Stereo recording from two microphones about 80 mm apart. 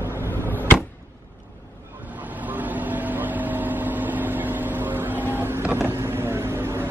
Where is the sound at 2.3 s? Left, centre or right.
Right.